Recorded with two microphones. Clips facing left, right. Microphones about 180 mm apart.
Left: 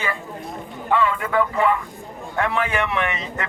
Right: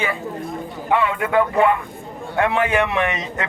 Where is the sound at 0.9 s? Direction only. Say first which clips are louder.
Right 2 dB; 20° right (ahead or behind).